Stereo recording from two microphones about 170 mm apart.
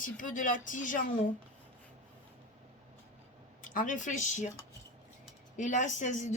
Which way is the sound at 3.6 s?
50° left (ahead or behind).